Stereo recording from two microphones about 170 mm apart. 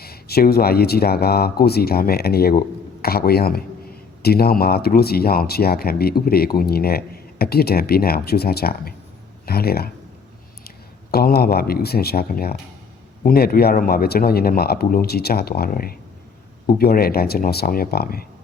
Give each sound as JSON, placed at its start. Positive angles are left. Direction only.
{"t": 0.0, "sound": "speech", "side_deg": 65}
{"t": 11.1, "sound": "speech", "side_deg": 65}